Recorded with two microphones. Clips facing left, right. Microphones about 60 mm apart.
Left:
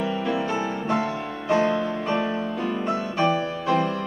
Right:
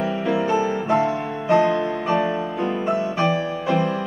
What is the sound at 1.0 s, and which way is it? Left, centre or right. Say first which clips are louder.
Music: right 5 dB; centre.